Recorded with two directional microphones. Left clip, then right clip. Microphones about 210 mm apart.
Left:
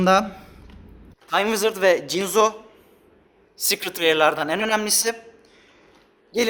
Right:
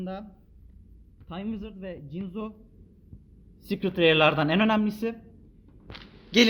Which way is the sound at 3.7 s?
15° left (ahead or behind).